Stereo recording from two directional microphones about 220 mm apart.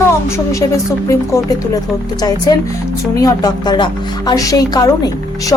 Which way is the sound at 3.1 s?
15° left (ahead or behind).